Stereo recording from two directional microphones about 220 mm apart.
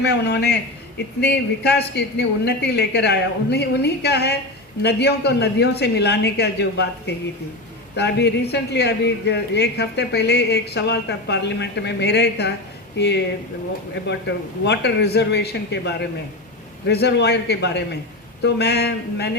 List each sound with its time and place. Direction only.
0.0 s speech: 50° left (ahead or behind)
7.9 s speech: 50° left (ahead or behind)